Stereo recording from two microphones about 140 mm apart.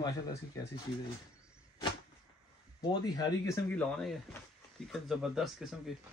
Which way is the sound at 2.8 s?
30° left (ahead or behind).